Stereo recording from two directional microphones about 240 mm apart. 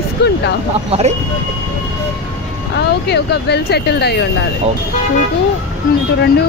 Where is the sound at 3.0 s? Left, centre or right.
Left.